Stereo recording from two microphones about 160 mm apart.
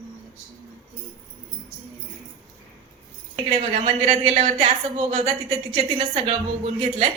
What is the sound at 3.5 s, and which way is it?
A woman's voice, 35° right (ahead or behind).